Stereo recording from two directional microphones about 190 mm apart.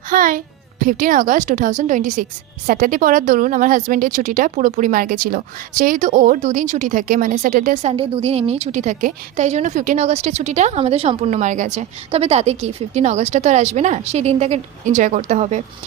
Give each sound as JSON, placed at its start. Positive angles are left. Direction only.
{"t": 0.1, "sound": "a woman's voice", "side_deg": -45}